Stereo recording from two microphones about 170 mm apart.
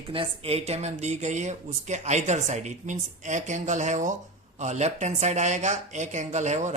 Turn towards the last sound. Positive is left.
turn(degrees=-45)  # may be behind; listen again after turning